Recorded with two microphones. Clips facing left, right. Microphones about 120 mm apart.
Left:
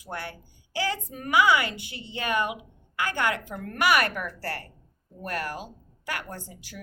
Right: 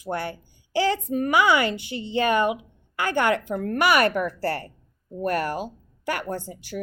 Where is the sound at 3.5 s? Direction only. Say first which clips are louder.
Right 2 dB; 40° right (ahead or behind).